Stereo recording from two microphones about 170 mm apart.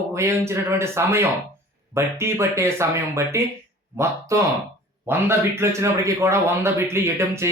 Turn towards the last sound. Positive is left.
turn(degrees=-15)  # may be behind; listen again after turning